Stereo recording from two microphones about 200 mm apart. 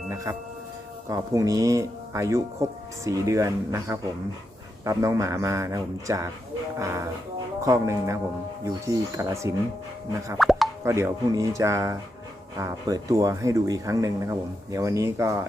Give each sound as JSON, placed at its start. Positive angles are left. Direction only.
{"t": 0.3, "sound": "speech", "side_deg": -15}
{"t": 10.3, "sound": "plop", "side_deg": 0}
{"t": 10.8, "sound": "speech", "side_deg": -15}